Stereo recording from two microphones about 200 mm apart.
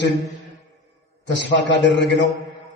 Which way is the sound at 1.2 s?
60° left (ahead or behind).